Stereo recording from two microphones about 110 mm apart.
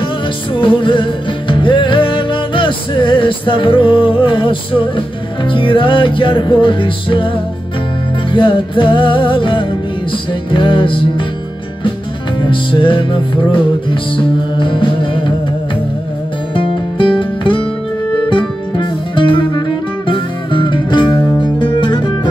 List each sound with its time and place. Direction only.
0.6 s music: 50° left (ahead or behind)
8.3 s music: 50° left (ahead or behind)
12.4 s music: 50° left (ahead or behind)
16.5 s music: 50° left (ahead or behind)
18.8 s music: 50° left (ahead or behind)